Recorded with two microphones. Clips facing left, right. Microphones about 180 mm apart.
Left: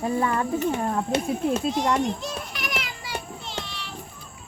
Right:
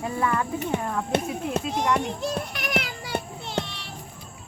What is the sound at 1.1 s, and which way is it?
Speech, 55° right (ahead or behind).